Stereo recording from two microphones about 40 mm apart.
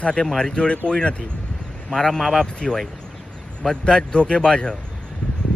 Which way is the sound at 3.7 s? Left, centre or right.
Left.